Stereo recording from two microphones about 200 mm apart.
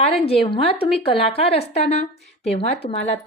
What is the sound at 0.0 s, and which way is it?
A woman's voice, 30° left (ahead or behind).